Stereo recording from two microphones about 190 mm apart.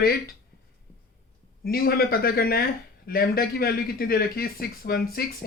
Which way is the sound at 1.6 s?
50° left (ahead or behind).